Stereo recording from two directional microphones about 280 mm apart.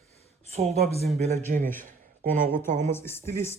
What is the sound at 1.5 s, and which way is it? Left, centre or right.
Speech, right.